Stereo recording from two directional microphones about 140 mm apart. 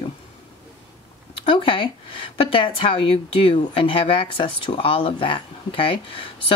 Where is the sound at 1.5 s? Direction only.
40° left (ahead or behind).